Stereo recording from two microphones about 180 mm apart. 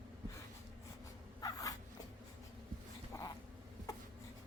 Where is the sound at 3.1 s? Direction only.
15° left (ahead or behind).